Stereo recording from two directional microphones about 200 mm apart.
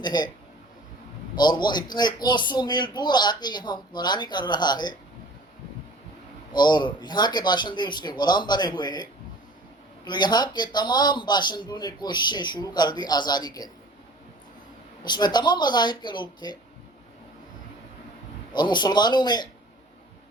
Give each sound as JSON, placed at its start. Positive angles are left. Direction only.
{"t": 0.0, "sound": "speech", "side_deg": 20}
{"t": 1.4, "sound": "speech", "side_deg": 20}
{"t": 6.5, "sound": "speech", "side_deg": 20}
{"t": 15.0, "sound": "speech", "side_deg": 20}
{"t": 18.5, "sound": "speech", "side_deg": 20}